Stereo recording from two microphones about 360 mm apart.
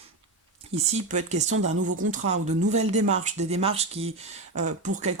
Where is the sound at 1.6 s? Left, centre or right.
Right.